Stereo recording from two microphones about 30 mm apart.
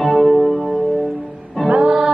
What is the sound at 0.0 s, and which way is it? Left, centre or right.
Music, centre.